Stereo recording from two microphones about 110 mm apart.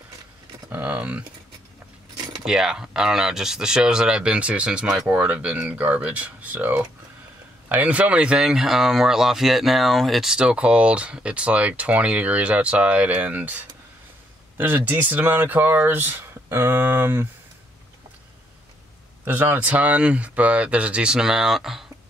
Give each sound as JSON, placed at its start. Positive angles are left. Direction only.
{"t": 0.7, "sound": "typing", "side_deg": -15}
{"t": 2.4, "sound": "speech", "side_deg": -5}
{"t": 14.6, "sound": "speech", "side_deg": -15}
{"t": 19.2, "sound": "speech", "side_deg": -15}